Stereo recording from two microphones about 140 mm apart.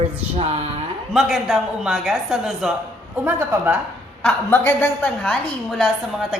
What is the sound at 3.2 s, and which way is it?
Speech, 15° right (ahead or behind).